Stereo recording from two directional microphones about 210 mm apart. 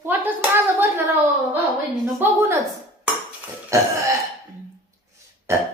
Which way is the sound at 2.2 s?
10° right (ahead or behind).